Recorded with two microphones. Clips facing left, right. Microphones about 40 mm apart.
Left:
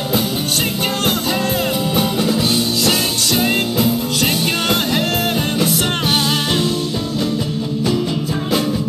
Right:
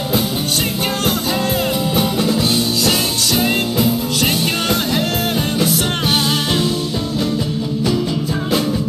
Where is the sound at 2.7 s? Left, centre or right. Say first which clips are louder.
Even; left.